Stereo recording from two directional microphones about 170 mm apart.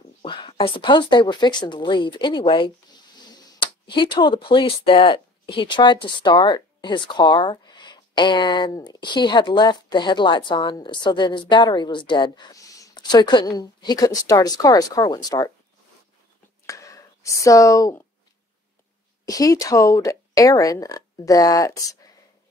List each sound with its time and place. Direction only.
0.2 s speech: 30° left (ahead or behind)
16.6 s speech: 20° left (ahead or behind)
19.2 s speech: 20° left (ahead or behind)